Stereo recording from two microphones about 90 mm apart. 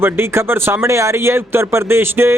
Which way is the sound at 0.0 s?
25° right (ahead or behind).